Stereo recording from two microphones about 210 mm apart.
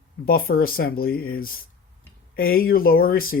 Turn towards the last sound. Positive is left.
turn(degrees=45)  # may be behind; listen again after turning